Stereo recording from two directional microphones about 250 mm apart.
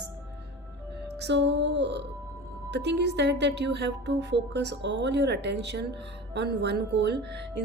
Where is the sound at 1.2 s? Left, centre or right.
Right.